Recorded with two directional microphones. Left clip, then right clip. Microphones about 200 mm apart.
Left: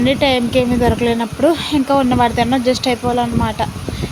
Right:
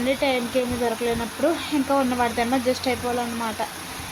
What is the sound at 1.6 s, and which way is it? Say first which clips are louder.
Speech: left 7 dB; 25° left (ahead or behind).